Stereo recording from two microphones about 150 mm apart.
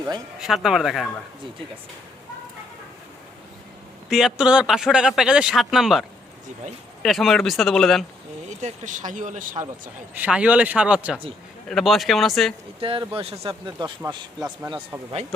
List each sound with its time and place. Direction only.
0.3 s speech: 5° right (ahead or behind)
4.1 s speech: 5° right (ahead or behind)
8.4 s speech: 55° right (ahead or behind)
10.2 s speech: 10° right (ahead or behind)
12.8 s speech: 35° right (ahead or behind)